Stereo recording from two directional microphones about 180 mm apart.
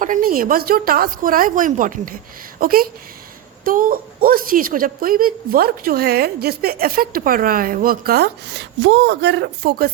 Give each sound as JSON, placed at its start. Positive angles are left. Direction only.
{"t": 0.0, "sound": "a woman's voice", "side_deg": -50}